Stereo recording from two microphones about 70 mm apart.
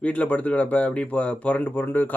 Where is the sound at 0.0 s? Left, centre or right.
Centre.